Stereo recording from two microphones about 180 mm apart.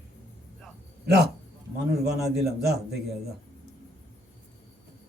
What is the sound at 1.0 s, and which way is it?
A man's voice, 65° right (ahead or behind).